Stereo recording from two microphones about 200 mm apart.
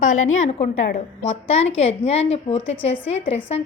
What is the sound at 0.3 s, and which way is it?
A woman's voice, 35° left (ahead or behind).